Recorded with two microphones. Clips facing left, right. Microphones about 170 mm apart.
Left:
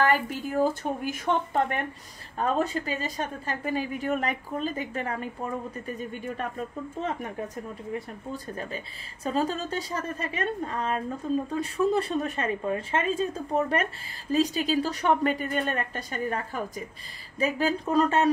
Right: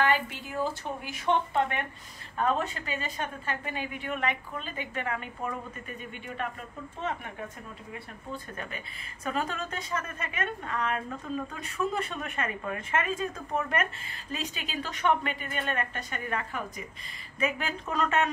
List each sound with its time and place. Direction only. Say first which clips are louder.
0.0 s a woman's voice: left 3 dB; 45° left (ahead or behind)
7.9 s a woman's voice: left 5 dB; 35° left (ahead or behind)